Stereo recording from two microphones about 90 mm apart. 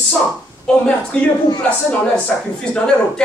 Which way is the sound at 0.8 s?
10° left (ahead or behind).